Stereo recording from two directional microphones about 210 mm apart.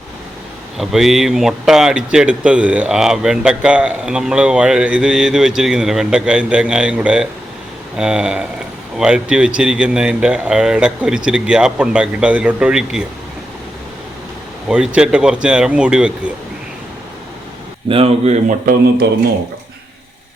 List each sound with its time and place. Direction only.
0.8 s speech: centre (ahead or behind)
14.7 s speech: 5° right (ahead or behind)
17.8 s speech: 25° right (ahead or behind)